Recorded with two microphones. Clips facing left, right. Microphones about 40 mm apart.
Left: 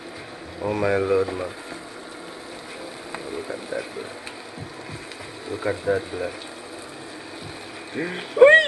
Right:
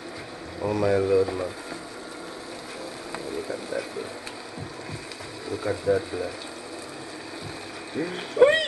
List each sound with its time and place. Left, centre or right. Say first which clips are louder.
0.7 s speech: even; left
3.1 s a sound: left 1 dB; centre
5.5 s speech: left 1 dB; left
7.9 s speech: left 2 dB; left